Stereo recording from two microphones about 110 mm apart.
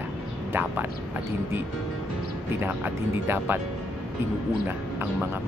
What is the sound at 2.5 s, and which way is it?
Speech, 20° right (ahead or behind).